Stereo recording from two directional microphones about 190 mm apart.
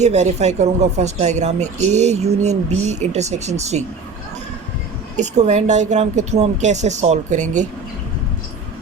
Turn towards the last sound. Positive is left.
turn(degrees=-40)  # may be behind; listen again after turning